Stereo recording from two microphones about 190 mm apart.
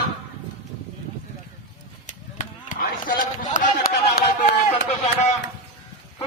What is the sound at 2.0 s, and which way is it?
Chop, 45° left (ahead or behind).